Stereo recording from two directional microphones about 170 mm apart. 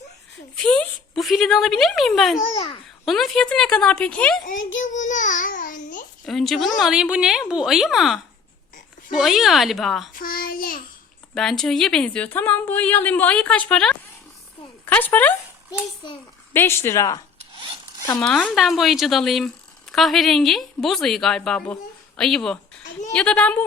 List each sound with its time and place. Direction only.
0.5 s a woman's voice: 5° left (ahead or behind)
2.6 s a child's voice: 30° left (ahead or behind)
3.1 s a woman's voice: centre (ahead or behind)
4.8 s child singing: 45° left (ahead or behind)
6.2 s a woman's voice: centre (ahead or behind)
10.2 s child singing: 60° left (ahead or behind)
11.3 s a woman's voice: 5° left (ahead or behind)
18.2 s a woman's voice: 5° left (ahead or behind)